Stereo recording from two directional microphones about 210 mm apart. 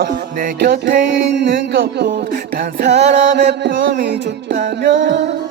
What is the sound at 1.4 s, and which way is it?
Music, 55° right (ahead or behind).